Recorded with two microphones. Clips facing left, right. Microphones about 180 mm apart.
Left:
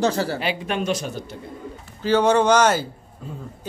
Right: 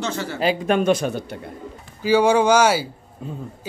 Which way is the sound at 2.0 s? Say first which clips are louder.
Right 1 dB; 10° right (ahead or behind).